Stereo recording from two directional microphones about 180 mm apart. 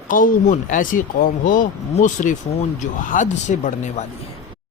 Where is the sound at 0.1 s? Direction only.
45° left (ahead or behind).